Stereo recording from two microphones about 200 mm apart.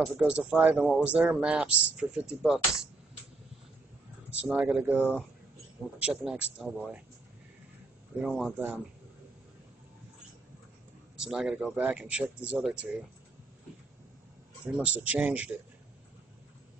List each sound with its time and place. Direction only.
0.0 s speech: 5° right (ahead or behind)
4.4 s speech: 5° right (ahead or behind)
8.2 s speech: centre (ahead or behind)
11.1 s speech: 5° right (ahead or behind)
14.7 s speech: 5° right (ahead or behind)